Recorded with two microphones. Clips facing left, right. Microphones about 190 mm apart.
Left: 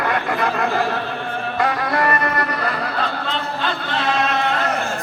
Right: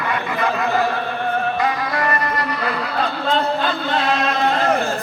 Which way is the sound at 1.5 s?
55° left (ahead or behind).